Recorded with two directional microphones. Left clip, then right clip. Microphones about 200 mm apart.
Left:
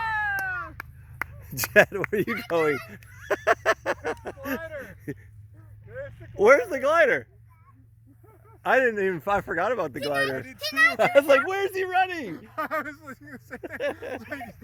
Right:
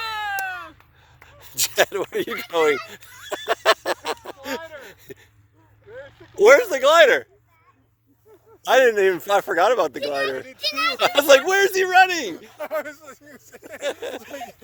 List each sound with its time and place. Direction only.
0.0 s a sound: 50° right (ahead or behind)
1.4 s speech: 5° right (ahead or behind)
3.6 s a sound: 5° right (ahead or behind)
6.3 s speech: 5° right (ahead or behind)
8.7 s speech: 15° right (ahead or behind)
10.0 s speech: centre (ahead or behind)
10.5 s speech: 35° left (ahead or behind)
10.9 s speech: 25° right (ahead or behind)
11.9 s speech: 20° right (ahead or behind)
13.8 s speech: 15° right (ahead or behind)